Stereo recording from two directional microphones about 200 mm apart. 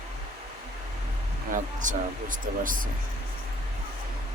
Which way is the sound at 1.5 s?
40° right (ahead or behind).